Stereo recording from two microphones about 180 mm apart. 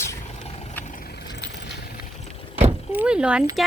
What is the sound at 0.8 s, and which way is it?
Vehicle, 50° left (ahead or behind).